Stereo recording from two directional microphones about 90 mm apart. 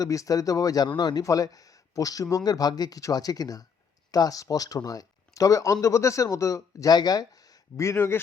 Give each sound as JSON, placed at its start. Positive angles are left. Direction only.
{"t": 0.0, "sound": "speech", "side_deg": 40}
{"t": 1.2, "sound": "speech", "side_deg": 40}